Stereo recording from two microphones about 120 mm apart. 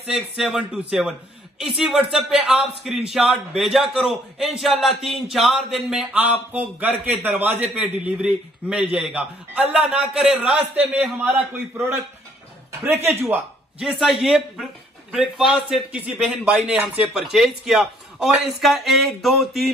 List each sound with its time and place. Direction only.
0.0 s a man's voice: 5° right (ahead or behind)
12.8 s speech: 20° right (ahead or behind)
13.7 s speech: centre (ahead or behind)